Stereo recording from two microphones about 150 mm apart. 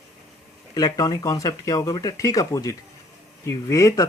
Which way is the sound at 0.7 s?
25° left (ahead or behind).